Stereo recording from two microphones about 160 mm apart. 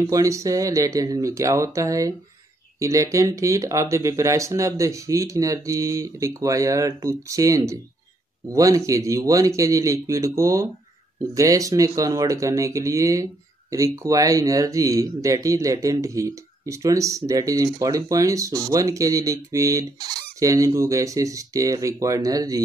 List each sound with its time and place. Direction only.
0.0 s speech: 20° right (ahead or behind)